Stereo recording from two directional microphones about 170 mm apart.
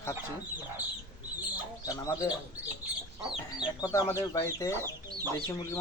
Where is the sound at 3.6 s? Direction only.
20° left (ahead or behind).